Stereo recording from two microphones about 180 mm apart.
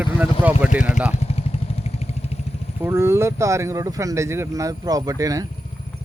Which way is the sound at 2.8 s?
15° right (ahead or behind).